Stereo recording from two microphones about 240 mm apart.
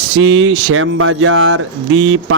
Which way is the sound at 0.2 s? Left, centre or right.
Right.